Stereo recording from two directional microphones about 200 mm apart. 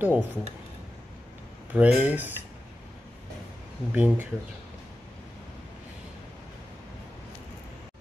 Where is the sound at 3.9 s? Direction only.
10° right (ahead or behind).